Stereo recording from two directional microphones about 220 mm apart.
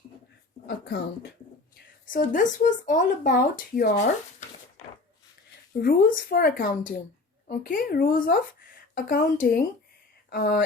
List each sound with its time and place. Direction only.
0.9 s a woman's voice: 45° left (ahead or behind)
5.7 s a woman's voice: 40° left (ahead or behind)